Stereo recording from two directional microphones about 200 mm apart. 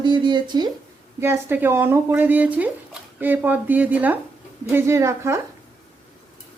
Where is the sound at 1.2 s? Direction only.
10° right (ahead or behind).